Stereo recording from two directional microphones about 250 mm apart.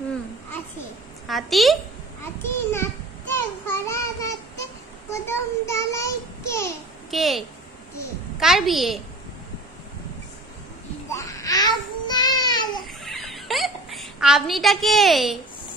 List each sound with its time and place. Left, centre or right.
1.2 s a woman's voice: centre
2.4 s a sound: centre
5.1 s child singing: centre
7.1 s a woman's voice: centre
11.1 s a sound: centre
12.8 s hiccup: centre